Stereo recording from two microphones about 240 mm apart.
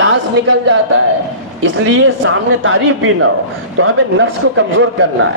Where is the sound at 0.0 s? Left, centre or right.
Right.